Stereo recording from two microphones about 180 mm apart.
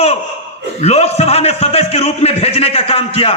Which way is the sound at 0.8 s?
35° left (ahead or behind).